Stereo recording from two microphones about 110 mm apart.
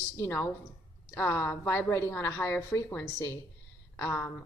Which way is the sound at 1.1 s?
20° left (ahead or behind).